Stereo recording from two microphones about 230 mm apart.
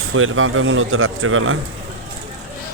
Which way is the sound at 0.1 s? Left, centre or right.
Right.